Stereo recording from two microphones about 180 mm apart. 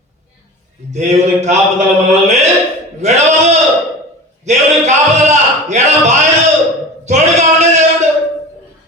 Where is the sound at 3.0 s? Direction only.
40° right (ahead or behind).